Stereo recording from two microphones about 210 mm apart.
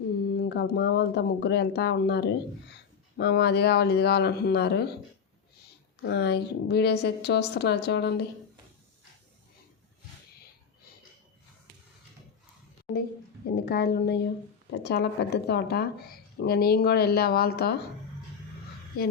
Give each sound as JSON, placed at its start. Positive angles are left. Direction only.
{"t": 0.3, "sound": "speech", "side_deg": 50}
{"t": 6.0, "sound": "speech", "side_deg": 50}
{"t": 13.6, "sound": "speech", "side_deg": 50}